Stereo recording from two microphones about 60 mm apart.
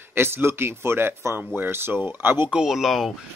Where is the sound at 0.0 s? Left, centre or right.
Right.